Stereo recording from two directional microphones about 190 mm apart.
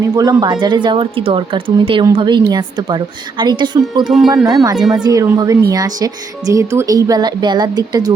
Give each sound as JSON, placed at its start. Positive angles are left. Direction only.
{"t": 0.0, "sound": "speech", "side_deg": -20}
{"t": 4.0, "sound": "speech", "side_deg": 0}
{"t": 4.4, "sound": "speech", "side_deg": -20}